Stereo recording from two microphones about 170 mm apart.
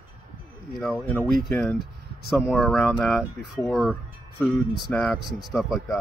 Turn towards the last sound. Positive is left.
turn(degrees=0)  # may be behind; listen again after turning